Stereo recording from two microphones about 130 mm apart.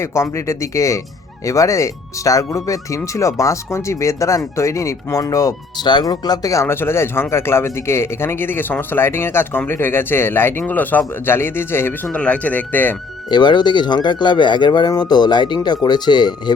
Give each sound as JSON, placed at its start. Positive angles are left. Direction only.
{"t": 0.0, "sound": "speech", "side_deg": 20}
{"t": 13.3, "sound": "speech", "side_deg": 35}